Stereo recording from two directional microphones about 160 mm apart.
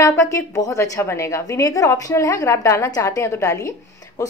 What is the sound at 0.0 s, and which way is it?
A woman's voice, 20° left (ahead or behind).